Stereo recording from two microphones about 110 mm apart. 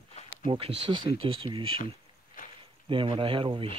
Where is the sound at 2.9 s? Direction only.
50° right (ahead or behind).